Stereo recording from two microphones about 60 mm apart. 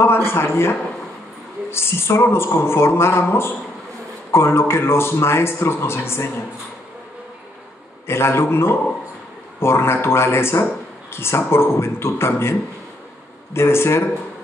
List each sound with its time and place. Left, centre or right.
0.0 s a man's voice: left
8.1 s a man's voice: left